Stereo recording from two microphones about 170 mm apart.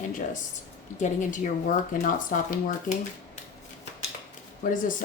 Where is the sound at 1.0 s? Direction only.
45° left (ahead or behind).